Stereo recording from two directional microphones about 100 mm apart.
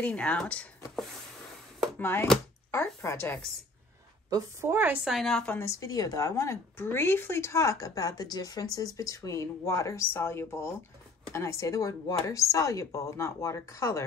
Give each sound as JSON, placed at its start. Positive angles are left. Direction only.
{"t": 0.0, "sound": "speech", "side_deg": 10}
{"t": 2.0, "sound": "chopping", "side_deg": 25}
{"t": 3.0, "sound": "a woman's voice", "side_deg": 25}
{"t": 4.3, "sound": "a woman's voice", "side_deg": -35}
{"t": 5.0, "sound": "a woman's voice", "side_deg": 0}
{"t": 5.5, "sound": "a woman's voice", "side_deg": 30}